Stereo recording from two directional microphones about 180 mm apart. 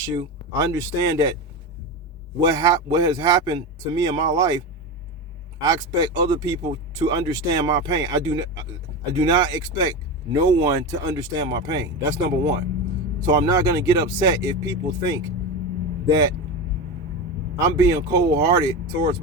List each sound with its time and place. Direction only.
0.0 s speech: 20° right (ahead or behind)
2.4 s speech: 20° right (ahead or behind)
5.5 s speech: 20° right (ahead or behind)
13.2 s speech: 20° right (ahead or behind)
17.6 s speech: 20° right (ahead or behind)